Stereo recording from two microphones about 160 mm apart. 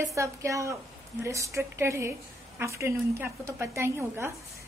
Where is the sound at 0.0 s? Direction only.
20° right (ahead or behind).